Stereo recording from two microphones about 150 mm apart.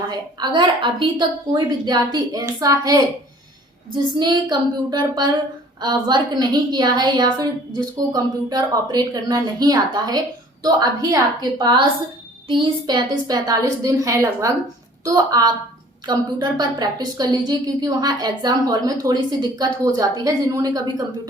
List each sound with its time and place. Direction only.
0.1 s a woman's voice: 30° right (ahead or behind)